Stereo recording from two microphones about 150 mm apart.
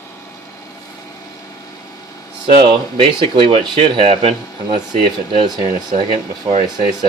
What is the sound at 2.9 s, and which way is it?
Speech, 35° right (ahead or behind).